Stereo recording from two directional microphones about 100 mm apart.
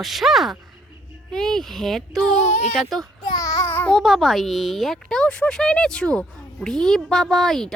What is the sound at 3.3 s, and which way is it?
Babbling, 35° left (ahead or behind).